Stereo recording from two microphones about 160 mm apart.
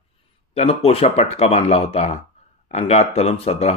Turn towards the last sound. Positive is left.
turn(degrees=40)  # may be behind; listen again after turning